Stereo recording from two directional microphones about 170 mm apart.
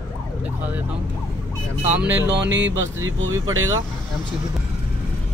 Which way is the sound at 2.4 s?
90° right.